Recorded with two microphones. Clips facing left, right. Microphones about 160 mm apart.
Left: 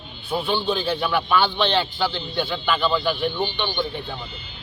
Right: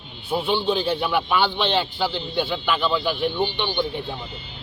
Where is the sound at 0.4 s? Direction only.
20° right (ahead or behind).